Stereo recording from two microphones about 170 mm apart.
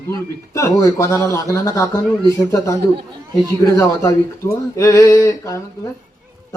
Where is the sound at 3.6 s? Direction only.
20° left (ahead or behind).